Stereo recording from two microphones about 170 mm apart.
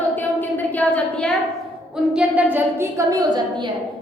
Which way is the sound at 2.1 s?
10° right (ahead or behind).